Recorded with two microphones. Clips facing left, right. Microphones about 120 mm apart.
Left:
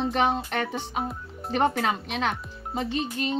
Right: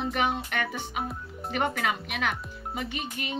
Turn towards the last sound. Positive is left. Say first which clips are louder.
# left 6 dB
turn(degrees=30)  # may be behind; listen again after turning